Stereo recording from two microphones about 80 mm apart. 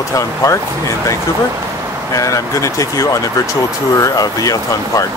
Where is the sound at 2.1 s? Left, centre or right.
Left.